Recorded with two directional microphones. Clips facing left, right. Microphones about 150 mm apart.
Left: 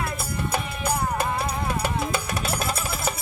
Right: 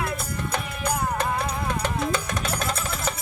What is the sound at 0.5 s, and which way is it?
Music, 10° left (ahead or behind).